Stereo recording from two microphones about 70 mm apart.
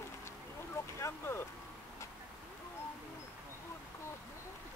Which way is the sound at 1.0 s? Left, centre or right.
Left.